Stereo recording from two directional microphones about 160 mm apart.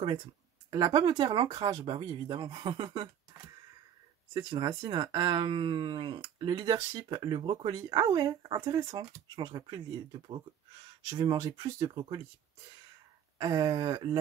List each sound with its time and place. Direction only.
0.7 s speech: 30° right (ahead or behind)
4.3 s speech: 30° right (ahead or behind)
13.4 s speech: 25° right (ahead or behind)